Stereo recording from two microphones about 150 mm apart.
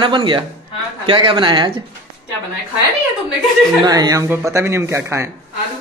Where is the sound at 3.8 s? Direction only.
25° right (ahead or behind).